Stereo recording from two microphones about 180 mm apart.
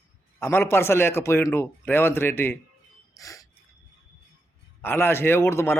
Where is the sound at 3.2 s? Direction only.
20° left (ahead or behind).